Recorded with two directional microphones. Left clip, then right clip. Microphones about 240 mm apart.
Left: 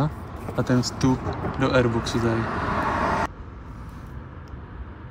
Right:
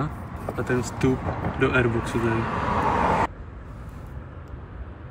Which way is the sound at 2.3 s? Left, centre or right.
Right.